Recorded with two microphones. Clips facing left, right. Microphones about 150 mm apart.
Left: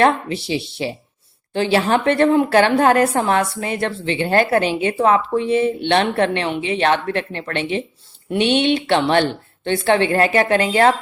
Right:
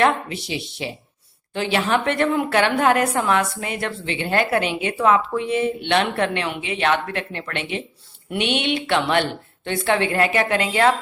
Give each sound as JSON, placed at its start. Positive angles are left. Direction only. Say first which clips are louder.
{"t": 0.0, "sound": "a woman's voice", "louder": "left 3 dB", "side_deg": 30}